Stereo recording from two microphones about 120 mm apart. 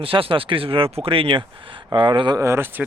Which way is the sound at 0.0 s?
50° right (ahead or behind).